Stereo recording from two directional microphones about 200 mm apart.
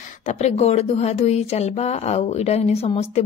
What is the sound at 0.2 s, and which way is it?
A woman's voice, 35° left (ahead or behind).